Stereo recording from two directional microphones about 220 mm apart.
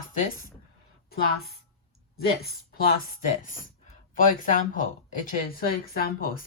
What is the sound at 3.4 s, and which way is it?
Speech, 40° left (ahead or behind).